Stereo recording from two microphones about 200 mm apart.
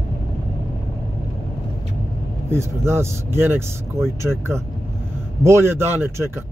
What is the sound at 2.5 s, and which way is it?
Speech, 10° right (ahead or behind).